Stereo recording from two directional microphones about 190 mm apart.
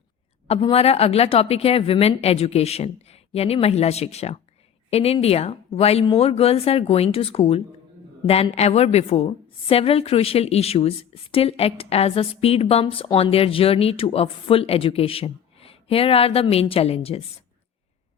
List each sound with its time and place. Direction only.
0.4 s a woman's voice: 30° left (ahead or behind)